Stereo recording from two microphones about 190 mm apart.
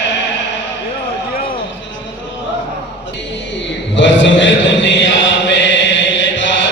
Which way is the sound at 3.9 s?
75° left (ahead or behind).